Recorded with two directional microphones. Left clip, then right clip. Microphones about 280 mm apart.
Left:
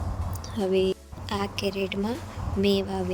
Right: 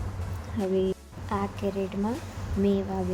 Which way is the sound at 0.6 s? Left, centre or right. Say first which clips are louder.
Left 3 dB; left.